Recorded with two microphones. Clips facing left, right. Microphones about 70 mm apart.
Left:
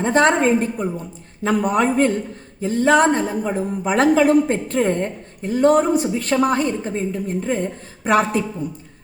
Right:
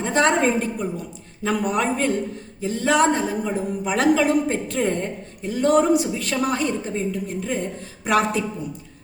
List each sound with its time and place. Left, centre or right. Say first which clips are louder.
0.0 s a woman's voice: left 3 dB; left